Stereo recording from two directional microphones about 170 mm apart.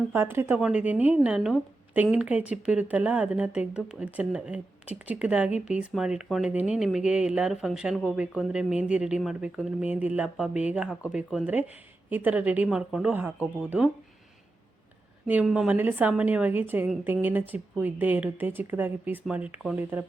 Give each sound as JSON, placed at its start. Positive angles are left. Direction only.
{"t": 0.1, "sound": "speech", "side_deg": -15}
{"t": 15.3, "sound": "speech", "side_deg": -5}